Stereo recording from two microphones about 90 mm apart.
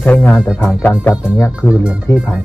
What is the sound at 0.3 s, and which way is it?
Speech, 5° right (ahead or behind).